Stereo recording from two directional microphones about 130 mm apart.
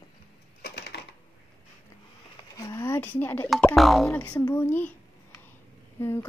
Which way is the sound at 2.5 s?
25° left (ahead or behind).